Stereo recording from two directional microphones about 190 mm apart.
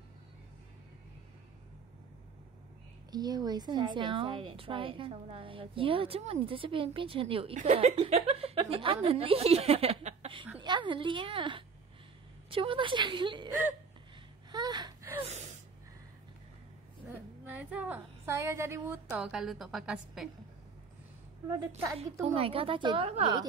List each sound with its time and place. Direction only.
3.1 s a woman's voice: 20° right (ahead or behind)
14.5 s whimper: 20° right (ahead or behind)
15.2 s gasp: 35° right (ahead or behind)
17.5 s a woman's voice: 10° right (ahead or behind)
21.5 s a woman's voice: 15° right (ahead or behind)
22.2 s a woman's voice: 30° right (ahead or behind)